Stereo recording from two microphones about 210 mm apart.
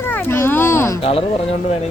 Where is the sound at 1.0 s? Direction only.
25° left (ahead or behind).